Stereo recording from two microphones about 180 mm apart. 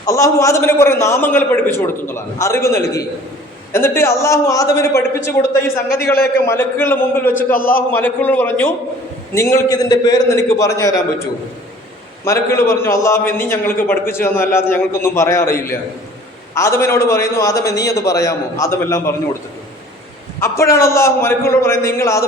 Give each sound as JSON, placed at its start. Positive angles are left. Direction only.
{"t": 0.0, "sound": "a man's voice", "side_deg": 15}
{"t": 7.3, "sound": "a man's voice", "side_deg": 50}
{"t": 7.9, "sound": "a man's voice", "side_deg": 10}
{"t": 12.2, "sound": "a man's voice", "side_deg": 15}
{"t": 20.4, "sound": "a man's voice", "side_deg": 15}